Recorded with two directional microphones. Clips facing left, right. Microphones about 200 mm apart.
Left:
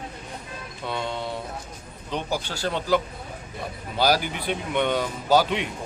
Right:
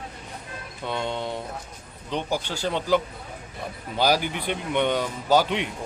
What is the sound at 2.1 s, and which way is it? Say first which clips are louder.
Speech: right 1 dB; 10° left (ahead or behind).